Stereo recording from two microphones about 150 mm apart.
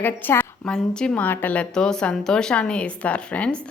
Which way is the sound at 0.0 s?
15° left (ahead or behind).